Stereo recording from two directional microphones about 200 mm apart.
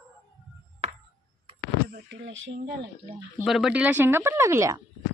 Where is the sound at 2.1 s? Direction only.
65° right (ahead or behind).